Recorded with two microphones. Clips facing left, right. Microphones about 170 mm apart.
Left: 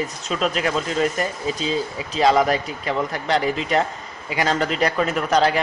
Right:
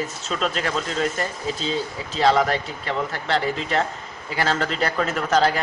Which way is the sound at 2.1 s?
5° left (ahead or behind).